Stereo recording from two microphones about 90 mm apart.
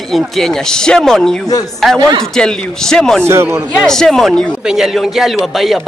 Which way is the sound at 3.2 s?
30° right (ahead or behind).